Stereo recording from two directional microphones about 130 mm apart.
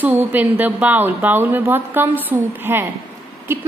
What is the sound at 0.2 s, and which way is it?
A woman's voice, 15° right (ahead or behind).